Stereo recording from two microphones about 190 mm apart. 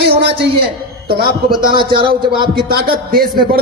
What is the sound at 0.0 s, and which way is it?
A man's voice, 60° right (ahead or behind).